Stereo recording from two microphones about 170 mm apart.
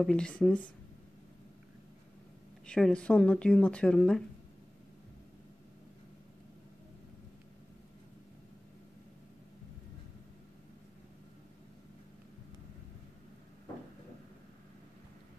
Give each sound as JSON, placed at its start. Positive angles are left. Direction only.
{"t": 0.0, "sound": "speech", "side_deg": 5}
{"t": 2.6, "sound": "speech", "side_deg": 5}